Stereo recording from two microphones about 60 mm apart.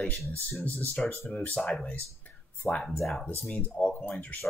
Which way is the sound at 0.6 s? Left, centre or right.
Left.